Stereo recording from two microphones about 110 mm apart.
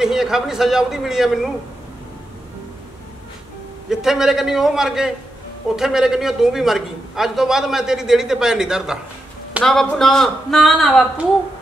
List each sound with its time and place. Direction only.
0.0 s a man's voice: 5° right (ahead or behind)
3.9 s a man's voice: 5° right (ahead or behind)